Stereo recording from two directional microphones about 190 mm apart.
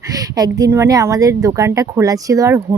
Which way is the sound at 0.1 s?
20° right (ahead or behind).